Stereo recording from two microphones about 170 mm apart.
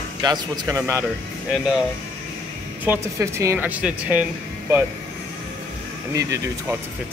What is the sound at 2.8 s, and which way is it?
Speech, 15° right (ahead or behind).